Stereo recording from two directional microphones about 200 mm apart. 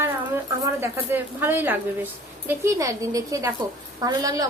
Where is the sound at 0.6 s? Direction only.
10° right (ahead or behind).